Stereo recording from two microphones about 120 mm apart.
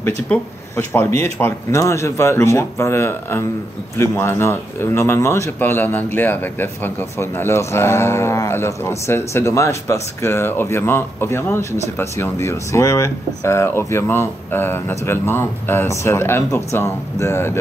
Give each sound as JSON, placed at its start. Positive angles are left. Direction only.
{"t": 1.2, "sound": "speech", "side_deg": 20}